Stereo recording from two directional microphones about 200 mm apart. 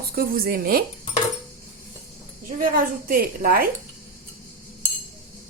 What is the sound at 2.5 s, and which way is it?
A woman's voice, 45° right (ahead or behind).